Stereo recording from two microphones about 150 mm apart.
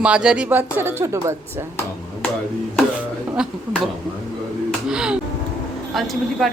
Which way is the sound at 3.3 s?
5° right (ahead or behind).